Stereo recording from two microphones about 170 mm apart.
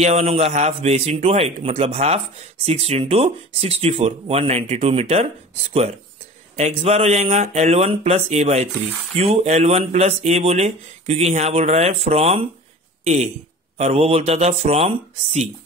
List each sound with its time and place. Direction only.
0.0 s a man's voice: 35° right (ahead or behind)